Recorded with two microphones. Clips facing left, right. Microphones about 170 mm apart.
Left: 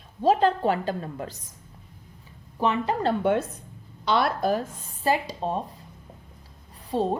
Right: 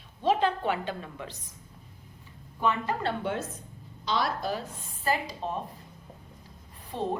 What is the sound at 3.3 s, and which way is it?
Speech, 55° left (ahead or behind).